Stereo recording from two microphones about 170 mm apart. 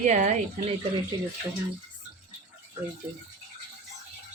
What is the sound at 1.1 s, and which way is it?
Speech, 25° right (ahead or behind).